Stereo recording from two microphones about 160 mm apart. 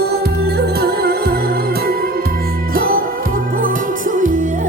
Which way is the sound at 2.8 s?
65° right (ahead or behind).